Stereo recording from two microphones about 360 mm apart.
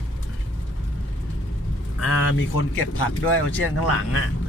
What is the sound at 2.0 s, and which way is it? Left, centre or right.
Speech, left.